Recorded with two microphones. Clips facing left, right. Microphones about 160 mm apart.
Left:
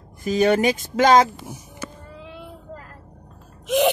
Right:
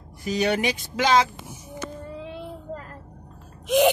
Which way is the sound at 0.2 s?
45° left (ahead or behind).